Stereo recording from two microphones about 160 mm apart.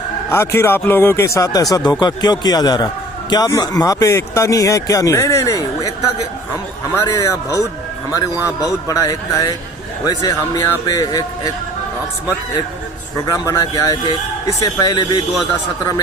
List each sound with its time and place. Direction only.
0.3 s a man's voice: 15° left (ahead or behind)
13.2 s a man's voice: 20° left (ahead or behind)